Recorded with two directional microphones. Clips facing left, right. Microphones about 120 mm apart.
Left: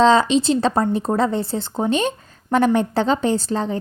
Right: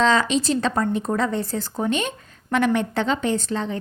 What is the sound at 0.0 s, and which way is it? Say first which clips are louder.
Speech: left 5 dB; 30° left (ahead or behind).